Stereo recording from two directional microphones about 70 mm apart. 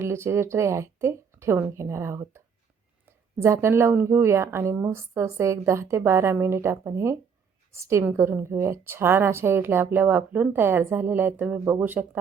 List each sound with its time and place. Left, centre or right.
0.0 s a woman's voice: right
8.1 s a woman's voice: right